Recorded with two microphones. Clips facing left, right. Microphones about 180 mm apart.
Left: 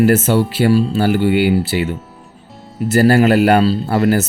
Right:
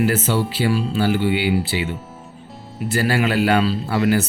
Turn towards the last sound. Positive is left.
turn(degrees=45)  # may be behind; listen again after turning